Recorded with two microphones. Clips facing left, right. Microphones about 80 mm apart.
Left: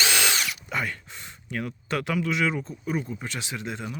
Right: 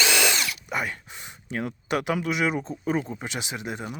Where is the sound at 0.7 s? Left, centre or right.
Centre.